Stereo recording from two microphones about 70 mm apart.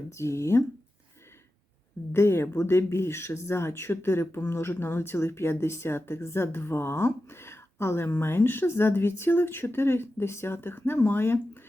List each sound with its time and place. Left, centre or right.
0.1 s speech: left
2.1 s speech: left